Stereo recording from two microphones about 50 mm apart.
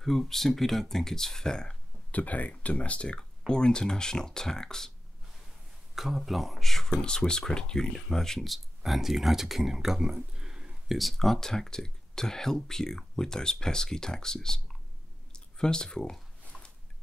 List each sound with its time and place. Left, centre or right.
0.0 s speech: centre
2.0 s speech: left; by 4.9 s centre
5.9 s speech: centre
11.0 s speech: centre
15.3 s a sound: centre